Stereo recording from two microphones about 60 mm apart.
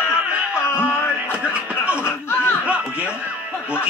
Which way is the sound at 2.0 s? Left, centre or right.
Left.